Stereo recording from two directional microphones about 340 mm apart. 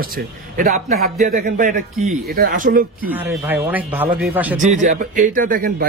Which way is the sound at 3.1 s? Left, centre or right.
Centre.